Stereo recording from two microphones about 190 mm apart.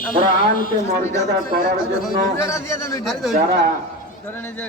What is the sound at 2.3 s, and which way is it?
Speech, 15° left (ahead or behind).